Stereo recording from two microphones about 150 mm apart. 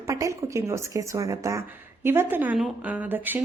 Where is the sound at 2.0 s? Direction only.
15° right (ahead or behind).